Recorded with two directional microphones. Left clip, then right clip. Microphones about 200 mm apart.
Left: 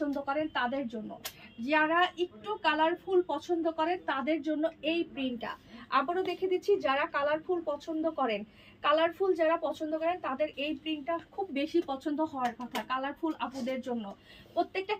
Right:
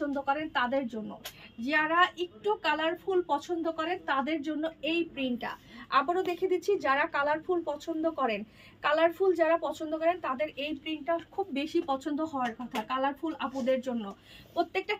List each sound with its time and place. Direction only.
0.2 s a woman's voice: 20° right (ahead or behind)